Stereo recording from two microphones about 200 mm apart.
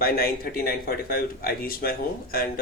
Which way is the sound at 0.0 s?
50° left (ahead or behind).